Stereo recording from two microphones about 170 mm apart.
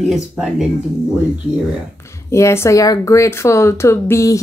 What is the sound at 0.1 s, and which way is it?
Speech, centre (ahead or behind).